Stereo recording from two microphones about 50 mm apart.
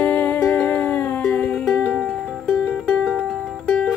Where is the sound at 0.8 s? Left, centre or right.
Left.